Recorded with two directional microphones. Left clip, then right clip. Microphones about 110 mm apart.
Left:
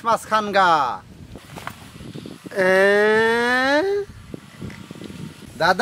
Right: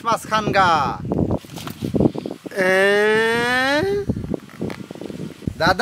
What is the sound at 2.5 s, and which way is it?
Speech, centre (ahead or behind).